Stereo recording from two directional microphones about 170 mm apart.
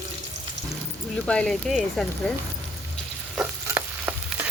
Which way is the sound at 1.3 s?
5° left (ahead or behind).